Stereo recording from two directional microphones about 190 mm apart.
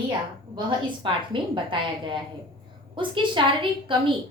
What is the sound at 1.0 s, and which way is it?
A woman's voice, 25° right (ahead or behind).